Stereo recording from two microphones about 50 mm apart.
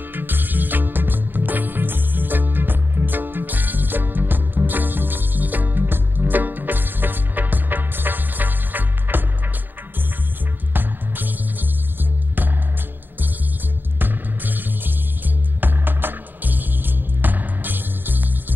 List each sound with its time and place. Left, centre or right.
0.1 s music: right
10.7 s music: right
13.9 s music: right